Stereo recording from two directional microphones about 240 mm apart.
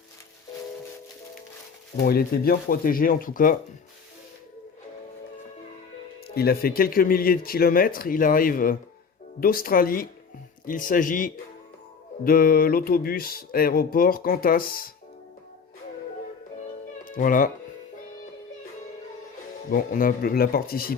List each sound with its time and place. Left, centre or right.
2.0 s speech: left
6.2 s speech: left
17.1 s speech: left
19.7 s speech: left